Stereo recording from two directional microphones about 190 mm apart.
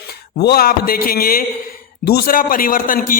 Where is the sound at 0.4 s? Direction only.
55° left (ahead or behind).